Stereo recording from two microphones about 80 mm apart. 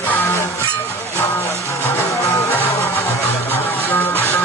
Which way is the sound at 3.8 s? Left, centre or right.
Left.